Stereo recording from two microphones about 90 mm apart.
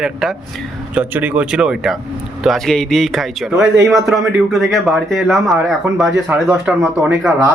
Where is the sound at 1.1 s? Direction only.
15° right (ahead or behind).